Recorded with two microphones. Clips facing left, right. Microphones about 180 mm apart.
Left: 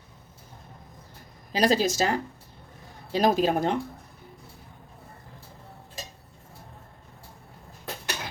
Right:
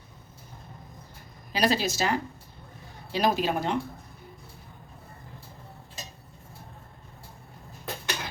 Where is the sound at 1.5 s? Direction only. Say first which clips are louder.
Left 3 dB; 40° left (ahead or behind).